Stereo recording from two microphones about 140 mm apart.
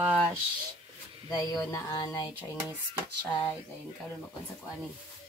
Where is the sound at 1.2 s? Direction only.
25° left (ahead or behind).